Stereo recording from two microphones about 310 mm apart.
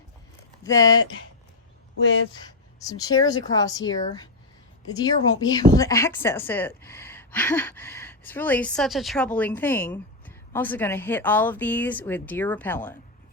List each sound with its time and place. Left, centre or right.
0.6 s speech: centre
2.0 s speech: left
2.4 s speech: centre